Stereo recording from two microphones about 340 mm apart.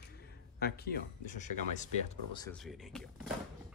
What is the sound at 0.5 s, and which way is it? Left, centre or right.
Speech, left.